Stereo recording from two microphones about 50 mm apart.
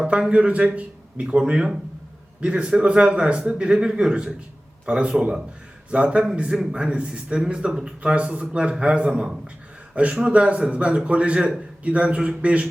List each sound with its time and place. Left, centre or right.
0.1 s a man's voice: right
1.4 s a man's voice: centre